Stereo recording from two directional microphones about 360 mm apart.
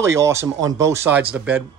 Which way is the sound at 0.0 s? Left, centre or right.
Centre.